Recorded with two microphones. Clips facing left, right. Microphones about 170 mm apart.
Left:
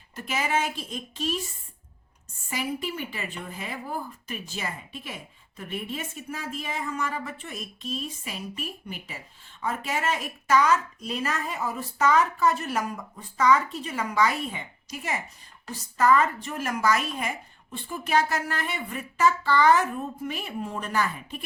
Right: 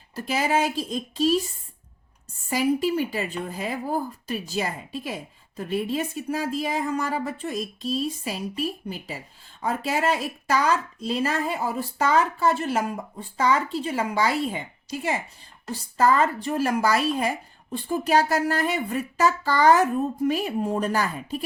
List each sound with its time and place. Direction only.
0.2 s speech: 35° right (ahead or behind)
2.5 s speech: 35° right (ahead or behind)